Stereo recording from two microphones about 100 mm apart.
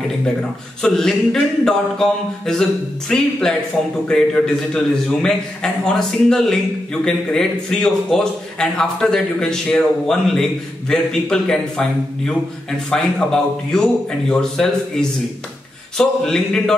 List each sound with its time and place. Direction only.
0.4 s a man's voice: 5° left (ahead or behind)